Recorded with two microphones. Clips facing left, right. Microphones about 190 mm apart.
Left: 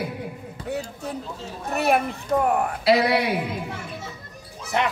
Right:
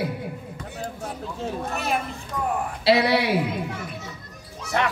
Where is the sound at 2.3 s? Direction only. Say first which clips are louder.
Left 8 dB; 60° left (ahead or behind).